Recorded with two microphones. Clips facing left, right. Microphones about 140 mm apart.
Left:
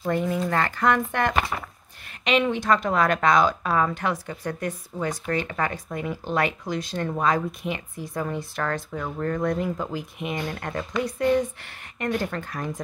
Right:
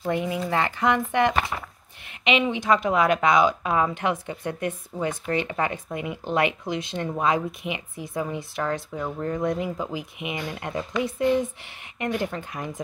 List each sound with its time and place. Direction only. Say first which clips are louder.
0.0 s speech: left 1 dB; 15° right (ahead or behind)
9.6 s speech: left 1 dB; 10° right (ahead or behind)